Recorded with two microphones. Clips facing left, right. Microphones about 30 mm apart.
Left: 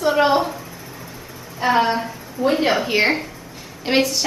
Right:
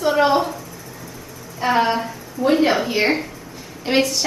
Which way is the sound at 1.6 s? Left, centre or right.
Centre.